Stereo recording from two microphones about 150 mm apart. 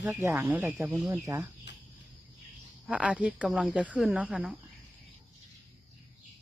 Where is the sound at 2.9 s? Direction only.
10° right (ahead or behind).